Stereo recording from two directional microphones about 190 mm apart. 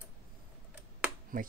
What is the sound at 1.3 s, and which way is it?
Speech, 45° right (ahead or behind).